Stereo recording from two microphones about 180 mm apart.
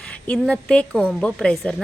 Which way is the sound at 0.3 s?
5° left (ahead or behind).